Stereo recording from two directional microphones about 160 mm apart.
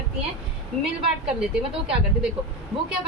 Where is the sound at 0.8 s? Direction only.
5° right (ahead or behind).